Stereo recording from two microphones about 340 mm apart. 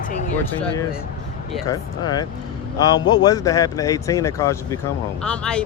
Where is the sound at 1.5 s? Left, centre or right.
Centre.